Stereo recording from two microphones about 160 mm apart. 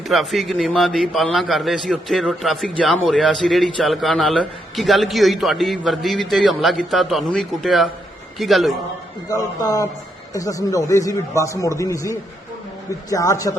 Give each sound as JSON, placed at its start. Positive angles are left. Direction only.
{"t": 0.1, "sound": "a man's voice", "side_deg": 0}
{"t": 9.3, "sound": "a man's voice", "side_deg": 20}